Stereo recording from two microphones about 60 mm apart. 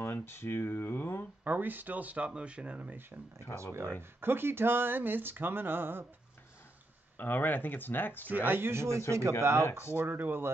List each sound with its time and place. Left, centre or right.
0.0 s speech: left
1.4 s speech: right
4.2 s speech: right
7.2 s speech: left
8.3 s speech: right
9.7 s speech: left
9.9 s speech: right